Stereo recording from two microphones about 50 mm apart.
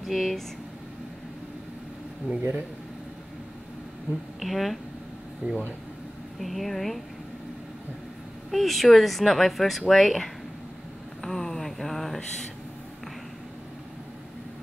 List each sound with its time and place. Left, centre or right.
0.0 s speech: centre
2.3 s speech: right
4.4 s speech: centre
5.4 s speech: right
6.4 s speech: centre
8.5 s speech: centre
11.2 s a sound: centre